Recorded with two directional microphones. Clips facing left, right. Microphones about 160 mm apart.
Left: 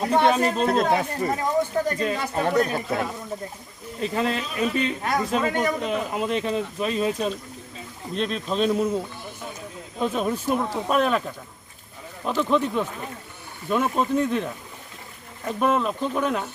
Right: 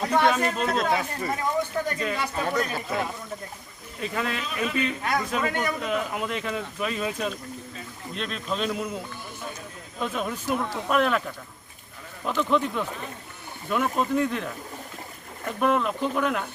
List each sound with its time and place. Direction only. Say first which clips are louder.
0.0 s speech: left 3 dB; 25° left (ahead or behind)
4.0 s a man's voice: left 4 dB; 30° left (ahead or behind)
10.0 s speech: left 5 dB; 30° left (ahead or behind)
10.6 s a man's voice: left 2 dB; 20° left (ahead or behind)
12.2 s a man's voice: left 2 dB; 20° left (ahead or behind)
15.4 s a man's voice: left 1 dB; 20° left (ahead or behind)